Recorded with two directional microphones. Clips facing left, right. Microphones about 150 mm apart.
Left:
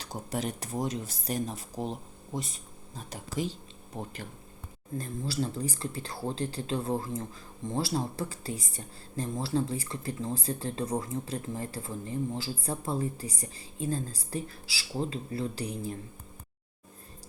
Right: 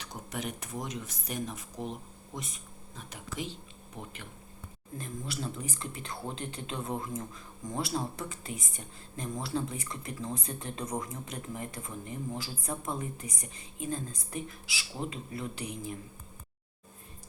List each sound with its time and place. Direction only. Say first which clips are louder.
0.0 s speech: left 4 dB; 35° left (ahead or behind)